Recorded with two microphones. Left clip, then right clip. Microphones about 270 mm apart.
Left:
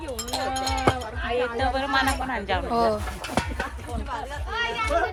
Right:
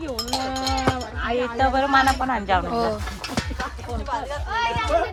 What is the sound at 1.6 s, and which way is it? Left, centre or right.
Speech, right.